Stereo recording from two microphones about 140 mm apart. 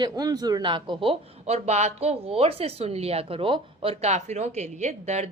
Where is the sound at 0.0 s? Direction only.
25° right (ahead or behind).